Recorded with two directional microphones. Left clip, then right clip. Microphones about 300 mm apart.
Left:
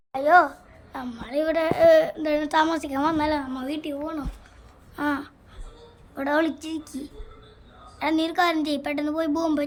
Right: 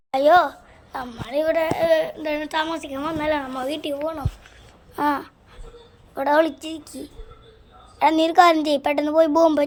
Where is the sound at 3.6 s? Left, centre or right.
Centre.